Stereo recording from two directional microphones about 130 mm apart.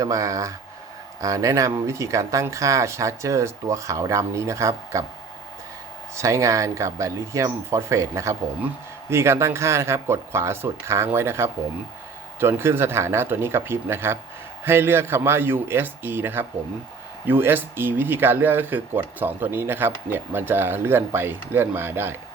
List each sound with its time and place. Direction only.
0.0 s speech: 25° right (ahead or behind)
6.1 s speech: 20° right (ahead or behind)